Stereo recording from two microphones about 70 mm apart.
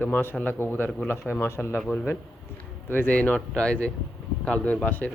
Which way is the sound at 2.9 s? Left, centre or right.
Left.